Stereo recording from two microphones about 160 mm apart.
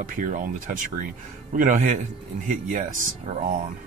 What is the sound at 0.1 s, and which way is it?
Speech, 55° right (ahead or behind).